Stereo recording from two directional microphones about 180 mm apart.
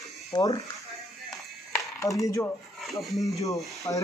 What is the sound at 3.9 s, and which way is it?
Speech, 15° left (ahead or behind).